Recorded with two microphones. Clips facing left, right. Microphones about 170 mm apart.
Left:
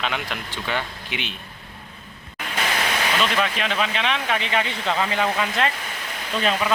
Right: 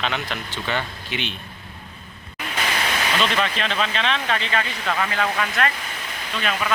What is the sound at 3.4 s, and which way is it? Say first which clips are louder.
Speech: even; 10° left (ahead or behind).